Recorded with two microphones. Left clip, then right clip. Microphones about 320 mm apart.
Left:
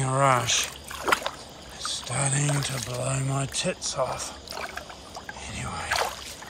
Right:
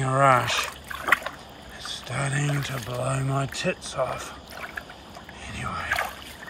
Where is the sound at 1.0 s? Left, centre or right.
Centre.